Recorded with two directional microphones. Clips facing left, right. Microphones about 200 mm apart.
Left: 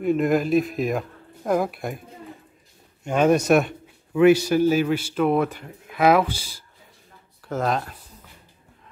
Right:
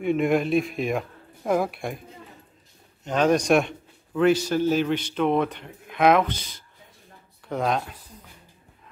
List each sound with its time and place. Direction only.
0.0 s speech: centre (ahead or behind)
3.0 s a man's voice: 10° left (ahead or behind)